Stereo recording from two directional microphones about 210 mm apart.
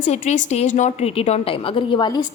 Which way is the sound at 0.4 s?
35° left (ahead or behind).